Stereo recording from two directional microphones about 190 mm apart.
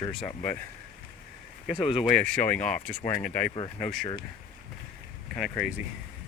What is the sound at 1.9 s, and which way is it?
Speech, 5° left (ahead or behind).